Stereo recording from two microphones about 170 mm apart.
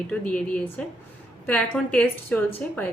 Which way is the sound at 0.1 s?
5° left (ahead or behind).